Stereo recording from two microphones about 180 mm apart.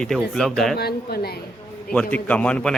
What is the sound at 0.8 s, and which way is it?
Speech, 60° left (ahead or behind).